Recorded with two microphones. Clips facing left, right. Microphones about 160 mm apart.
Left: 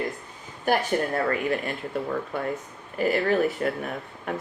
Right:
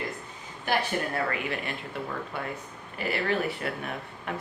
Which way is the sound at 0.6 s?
45° left (ahead or behind).